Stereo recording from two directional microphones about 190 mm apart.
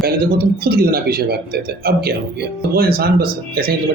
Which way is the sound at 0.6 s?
55° right (ahead or behind).